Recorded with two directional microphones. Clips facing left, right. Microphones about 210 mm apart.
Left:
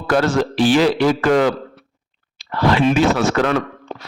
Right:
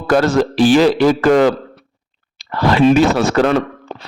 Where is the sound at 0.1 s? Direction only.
40° right (ahead or behind).